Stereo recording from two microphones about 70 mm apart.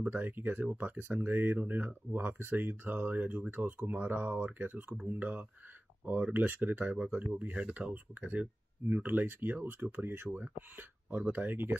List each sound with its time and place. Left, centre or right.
0.0 s speech: right